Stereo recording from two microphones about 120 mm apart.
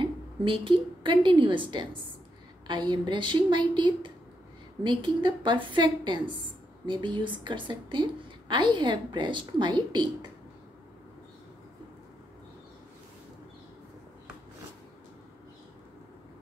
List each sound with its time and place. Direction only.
0.0 s a woman's voice: 45° right (ahead or behind)